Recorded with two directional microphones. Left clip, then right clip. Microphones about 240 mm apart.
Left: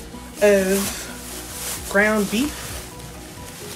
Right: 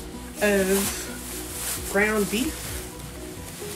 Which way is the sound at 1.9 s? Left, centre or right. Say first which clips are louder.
Left 5 dB; centre.